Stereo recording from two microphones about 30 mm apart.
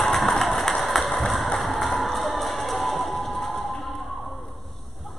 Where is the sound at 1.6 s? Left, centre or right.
Centre.